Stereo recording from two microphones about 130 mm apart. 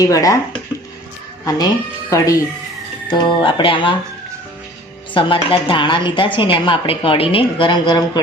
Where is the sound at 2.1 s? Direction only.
25° left (ahead or behind).